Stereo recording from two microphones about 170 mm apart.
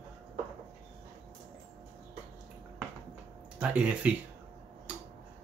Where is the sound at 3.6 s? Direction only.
5° right (ahead or behind).